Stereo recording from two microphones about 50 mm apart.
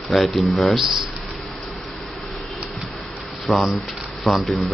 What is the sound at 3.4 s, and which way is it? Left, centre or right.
Speech, centre.